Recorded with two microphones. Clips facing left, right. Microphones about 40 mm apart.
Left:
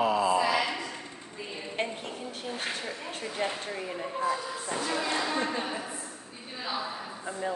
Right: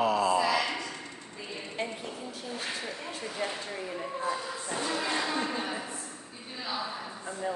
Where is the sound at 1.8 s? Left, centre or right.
Left.